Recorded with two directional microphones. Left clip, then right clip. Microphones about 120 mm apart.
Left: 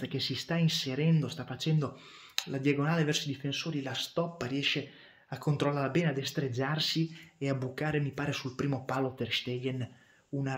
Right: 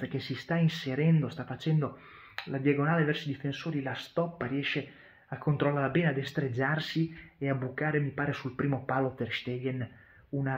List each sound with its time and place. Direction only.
0.0 s speech: 30° left (ahead or behind)
2.3 s speech: 35° left (ahead or behind)
3.6 s speech: 20° left (ahead or behind)
8.7 s speech: 20° left (ahead or behind)
9.3 s speech: 35° left (ahead or behind)